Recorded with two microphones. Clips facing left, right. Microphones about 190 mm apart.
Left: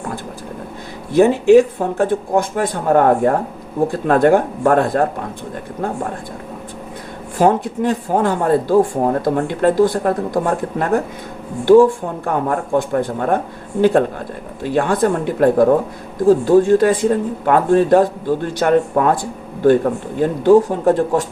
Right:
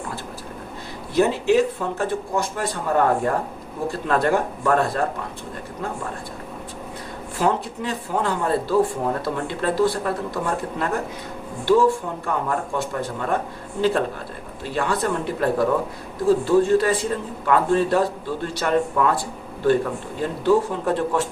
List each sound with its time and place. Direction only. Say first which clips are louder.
1.1 s speech: left 8 dB; 50° left (ahead or behind)
7.3 s speech: left 8 dB; 50° left (ahead or behind)
14.6 s speech: left 7 dB; 50° left (ahead or behind)